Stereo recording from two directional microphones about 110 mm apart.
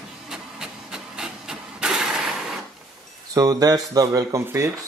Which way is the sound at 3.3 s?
35° right (ahead or behind).